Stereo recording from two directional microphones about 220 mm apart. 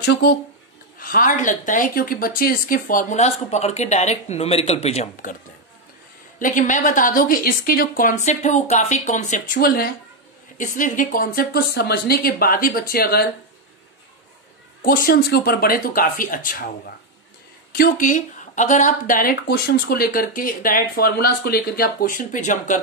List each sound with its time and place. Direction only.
0.0 s speech: 50° left (ahead or behind)
0.9 s speech: 40° left (ahead or behind)
6.4 s speech: 35° left (ahead or behind)
14.8 s speech: 45° left (ahead or behind)